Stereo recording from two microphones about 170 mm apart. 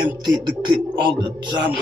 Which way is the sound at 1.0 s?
25° right (ahead or behind).